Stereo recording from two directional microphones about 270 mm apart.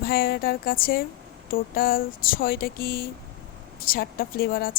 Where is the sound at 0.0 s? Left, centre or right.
Left.